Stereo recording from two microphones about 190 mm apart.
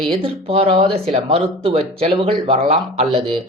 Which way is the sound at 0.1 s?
30° right (ahead or behind).